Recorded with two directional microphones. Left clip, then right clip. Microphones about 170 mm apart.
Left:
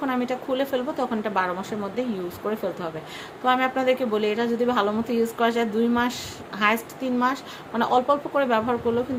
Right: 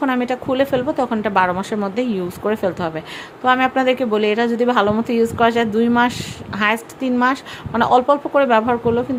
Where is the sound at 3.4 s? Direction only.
40° right (ahead or behind).